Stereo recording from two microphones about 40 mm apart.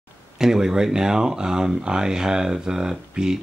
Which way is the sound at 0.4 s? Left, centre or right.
Centre.